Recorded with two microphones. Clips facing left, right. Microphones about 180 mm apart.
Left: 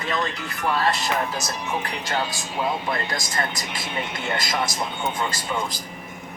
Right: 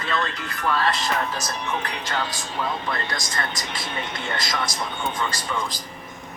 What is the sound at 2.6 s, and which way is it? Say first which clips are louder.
Speech: left 2 dB; 25° left (ahead or behind).